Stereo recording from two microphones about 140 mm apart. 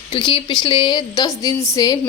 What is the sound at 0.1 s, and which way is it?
A woman's voice, 35° left (ahead or behind).